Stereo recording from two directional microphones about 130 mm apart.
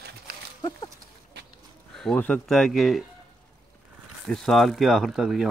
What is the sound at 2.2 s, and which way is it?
Speech, 5° left (ahead or behind).